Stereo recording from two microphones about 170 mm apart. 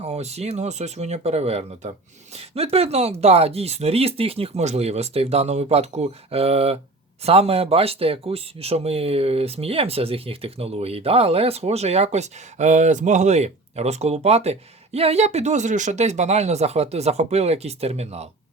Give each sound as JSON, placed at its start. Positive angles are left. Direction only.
{"t": 0.0, "sound": "speech", "side_deg": -40}